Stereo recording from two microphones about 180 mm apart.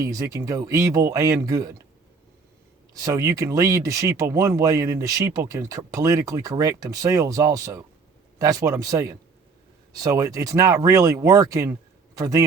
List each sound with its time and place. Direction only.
0.0 s speech: 20° right (ahead or behind)
2.9 s speech: 20° right (ahead or behind)